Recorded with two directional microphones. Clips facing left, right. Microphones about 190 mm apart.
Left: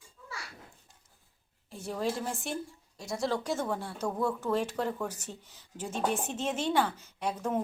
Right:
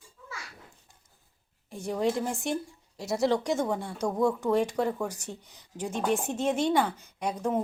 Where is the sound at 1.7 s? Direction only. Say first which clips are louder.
Right 5 dB; 15° right (ahead or behind).